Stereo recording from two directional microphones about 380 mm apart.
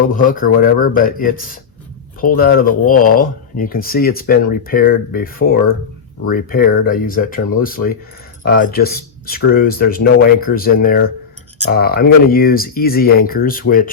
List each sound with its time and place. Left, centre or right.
0.1 s speech: left